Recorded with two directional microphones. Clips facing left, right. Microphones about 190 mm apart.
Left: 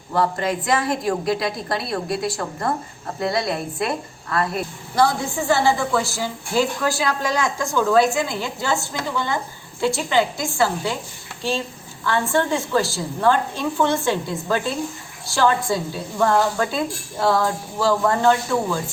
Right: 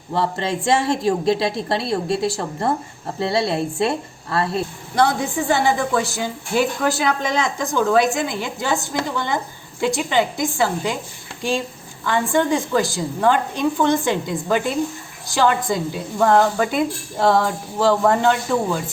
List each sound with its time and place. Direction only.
0.1 s a woman's voice: 25° right (ahead or behind)
12.0 s a woman's voice: 15° right (ahead or behind)